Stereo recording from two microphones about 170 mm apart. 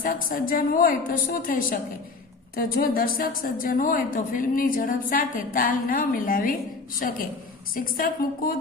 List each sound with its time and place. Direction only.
0.0 s a woman's voice: 55° left (ahead or behind)
7.8 s a woman's voice: 55° left (ahead or behind)